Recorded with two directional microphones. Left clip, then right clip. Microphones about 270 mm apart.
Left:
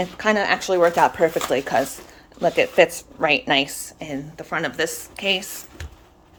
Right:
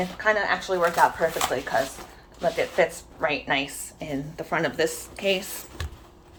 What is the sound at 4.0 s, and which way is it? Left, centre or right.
Speech, centre.